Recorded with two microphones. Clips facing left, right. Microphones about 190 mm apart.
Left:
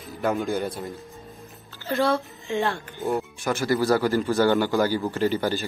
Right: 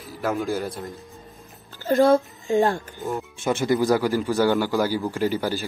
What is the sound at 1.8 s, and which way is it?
Speech, 45° right (ahead or behind).